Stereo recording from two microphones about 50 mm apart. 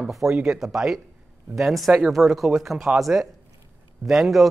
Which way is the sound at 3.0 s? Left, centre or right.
Centre.